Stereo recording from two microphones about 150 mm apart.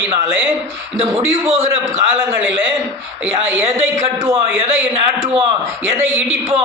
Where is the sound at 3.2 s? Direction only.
10° right (ahead or behind).